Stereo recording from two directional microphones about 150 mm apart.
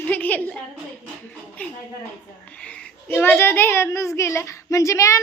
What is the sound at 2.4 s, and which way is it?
A child's voice, 10° left (ahead or behind).